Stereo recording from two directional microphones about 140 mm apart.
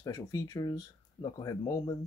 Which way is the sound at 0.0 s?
25° left (ahead or behind).